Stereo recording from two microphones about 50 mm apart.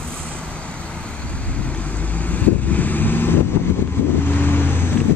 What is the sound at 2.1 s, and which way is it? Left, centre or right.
Vehicle, left.